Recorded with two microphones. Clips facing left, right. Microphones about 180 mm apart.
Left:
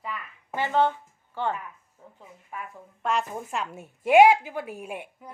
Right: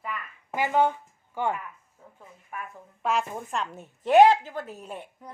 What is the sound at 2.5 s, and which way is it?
Speech, 15° left (ahead or behind).